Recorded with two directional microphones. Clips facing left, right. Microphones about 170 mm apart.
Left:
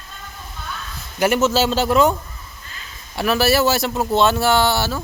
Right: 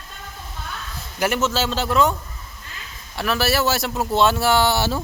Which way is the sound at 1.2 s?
5° left (ahead or behind).